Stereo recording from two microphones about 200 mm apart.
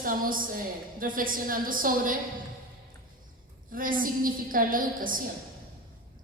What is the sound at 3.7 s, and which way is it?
A woman's voice, 45° right (ahead or behind).